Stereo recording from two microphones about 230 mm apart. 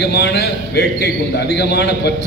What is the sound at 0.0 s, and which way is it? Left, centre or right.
A man's voice, left.